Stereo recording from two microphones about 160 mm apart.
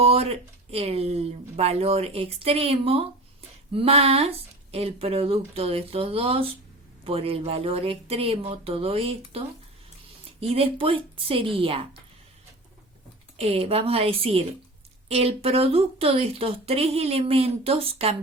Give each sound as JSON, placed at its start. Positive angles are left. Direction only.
{"t": 0.0, "sound": "speech", "side_deg": -40}
{"t": 13.4, "sound": "speech", "side_deg": -40}